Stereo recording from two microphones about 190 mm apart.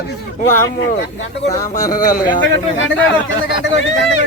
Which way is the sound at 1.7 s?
45° left (ahead or behind).